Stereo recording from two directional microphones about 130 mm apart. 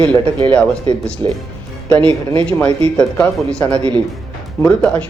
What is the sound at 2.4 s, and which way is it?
Speech, 10° left (ahead or behind).